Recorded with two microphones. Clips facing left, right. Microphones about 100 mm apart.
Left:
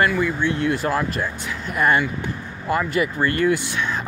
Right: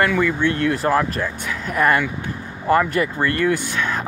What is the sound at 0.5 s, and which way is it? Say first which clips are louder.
Speech: right 3 dB; 45° right (ahead or behind).